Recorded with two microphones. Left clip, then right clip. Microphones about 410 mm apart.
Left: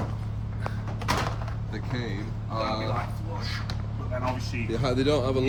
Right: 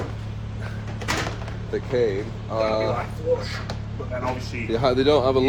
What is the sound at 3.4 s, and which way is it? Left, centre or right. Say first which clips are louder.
Speech: right 3 dB; centre.